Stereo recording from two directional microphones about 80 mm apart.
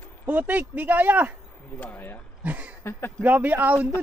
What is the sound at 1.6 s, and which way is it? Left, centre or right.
Speech, centre.